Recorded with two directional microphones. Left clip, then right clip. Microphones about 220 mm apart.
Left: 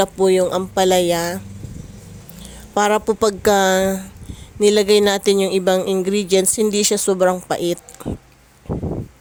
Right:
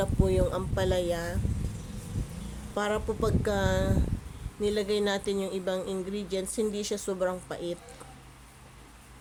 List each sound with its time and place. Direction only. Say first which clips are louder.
0.0 s speech: left 12 dB; 35° left (ahead or behind)
2.7 s speech: left 14 dB; 40° left (ahead or behind)